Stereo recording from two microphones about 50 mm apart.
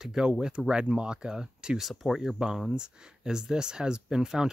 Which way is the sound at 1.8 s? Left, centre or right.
Centre.